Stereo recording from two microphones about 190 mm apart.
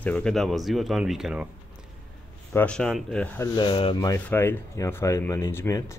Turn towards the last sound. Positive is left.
turn(degrees=15)  # may be behind; listen again after turning